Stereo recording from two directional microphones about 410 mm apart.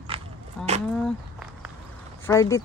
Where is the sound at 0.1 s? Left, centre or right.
Centre.